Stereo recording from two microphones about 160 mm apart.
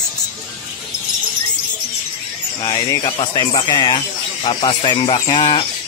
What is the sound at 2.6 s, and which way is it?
Speech, 25° left (ahead or behind).